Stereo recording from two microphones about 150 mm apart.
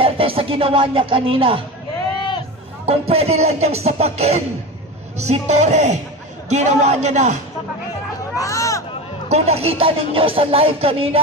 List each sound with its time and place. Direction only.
0.0 s music: 40° right (ahead or behind)
2.9 s speech: 40° right (ahead or behind)
8.4 s speech: 20° left (ahead or behind)
9.3 s music: 40° right (ahead or behind)